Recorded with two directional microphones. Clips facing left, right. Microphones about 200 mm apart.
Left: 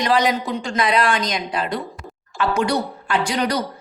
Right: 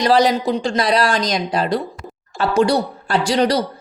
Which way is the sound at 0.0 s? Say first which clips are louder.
Right 4 dB; 35° right (ahead or behind).